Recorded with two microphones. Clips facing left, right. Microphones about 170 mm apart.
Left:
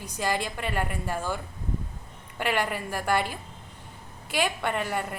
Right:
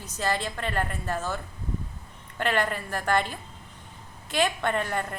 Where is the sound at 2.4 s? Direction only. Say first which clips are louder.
Right 1 dB; 10° left (ahead or behind).